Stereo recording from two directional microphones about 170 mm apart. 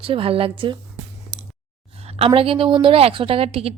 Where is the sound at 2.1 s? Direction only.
35° right (ahead or behind).